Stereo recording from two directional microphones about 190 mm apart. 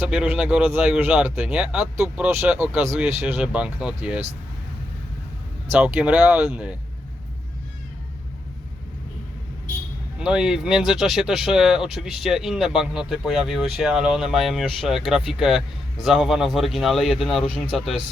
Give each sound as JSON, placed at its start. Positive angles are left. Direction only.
{"t": 0.0, "sound": "speech", "side_deg": -5}
{"t": 5.7, "sound": "speech", "side_deg": -5}
{"t": 10.2, "sound": "speech", "side_deg": -5}